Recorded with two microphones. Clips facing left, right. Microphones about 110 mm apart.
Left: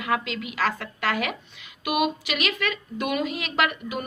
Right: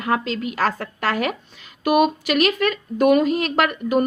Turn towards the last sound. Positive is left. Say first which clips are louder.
# right 7 dB
turn(degrees=-45)  # may be behind; listen again after turning